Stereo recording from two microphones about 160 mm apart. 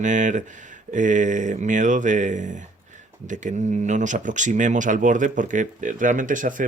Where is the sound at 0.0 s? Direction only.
50° right (ahead or behind).